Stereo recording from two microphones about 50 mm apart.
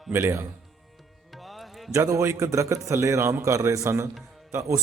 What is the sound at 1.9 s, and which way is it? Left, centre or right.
A man's voice, right.